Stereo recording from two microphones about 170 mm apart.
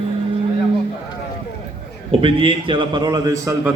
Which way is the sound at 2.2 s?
30° right (ahead or behind).